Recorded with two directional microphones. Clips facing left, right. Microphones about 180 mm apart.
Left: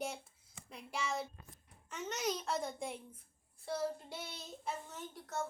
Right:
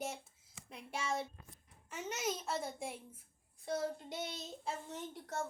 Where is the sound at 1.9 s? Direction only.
10° right (ahead or behind).